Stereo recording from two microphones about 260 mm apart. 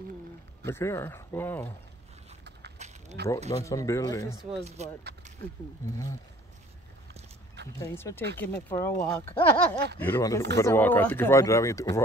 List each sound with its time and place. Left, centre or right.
0.7 s speech: centre
2.8 s a sound: right
3.2 s speech: right
3.6 s speech: centre
4.6 s speech: right
7.8 s speech: centre